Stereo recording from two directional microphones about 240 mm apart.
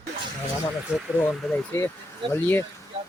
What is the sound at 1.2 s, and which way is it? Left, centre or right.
Speech, centre.